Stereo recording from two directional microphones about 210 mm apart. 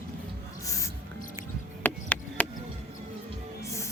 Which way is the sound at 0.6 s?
15° left (ahead or behind).